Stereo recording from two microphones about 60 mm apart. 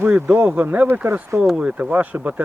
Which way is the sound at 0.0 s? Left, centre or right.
Right.